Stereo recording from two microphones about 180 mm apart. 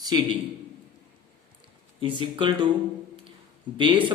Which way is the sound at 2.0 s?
30° right (ahead or behind).